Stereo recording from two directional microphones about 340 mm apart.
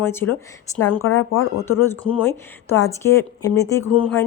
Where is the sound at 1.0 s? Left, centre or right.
Left.